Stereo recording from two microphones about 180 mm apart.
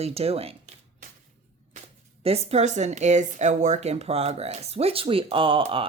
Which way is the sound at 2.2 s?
35° right (ahead or behind).